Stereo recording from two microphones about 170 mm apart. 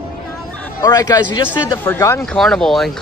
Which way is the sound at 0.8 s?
20° left (ahead or behind).